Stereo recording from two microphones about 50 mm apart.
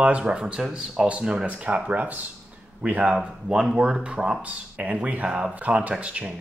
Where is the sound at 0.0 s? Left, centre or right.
Right.